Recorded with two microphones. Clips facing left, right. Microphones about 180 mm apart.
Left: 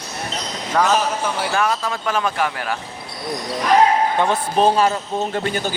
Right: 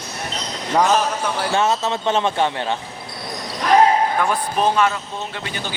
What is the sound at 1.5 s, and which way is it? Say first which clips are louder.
Speech: right 4 dB; 25° right (ahead or behind).